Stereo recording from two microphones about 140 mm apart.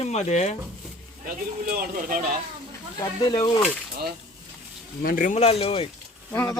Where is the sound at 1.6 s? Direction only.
85° right.